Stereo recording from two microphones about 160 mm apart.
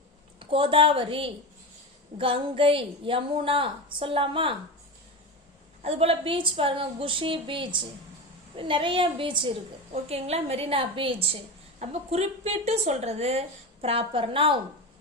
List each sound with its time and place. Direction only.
0.3 s a woman's voice: 35° right (ahead or behind)
5.8 s a woman's voice: 40° right (ahead or behind)